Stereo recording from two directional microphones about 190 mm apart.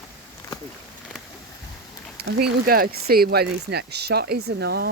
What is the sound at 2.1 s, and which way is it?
Speech, 60° right (ahead or behind).